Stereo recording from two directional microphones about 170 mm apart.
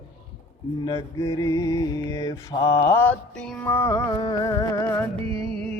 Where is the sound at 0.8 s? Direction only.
20° left (ahead or behind).